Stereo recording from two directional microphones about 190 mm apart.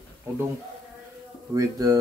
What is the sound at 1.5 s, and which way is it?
Speech, 20° right (ahead or behind).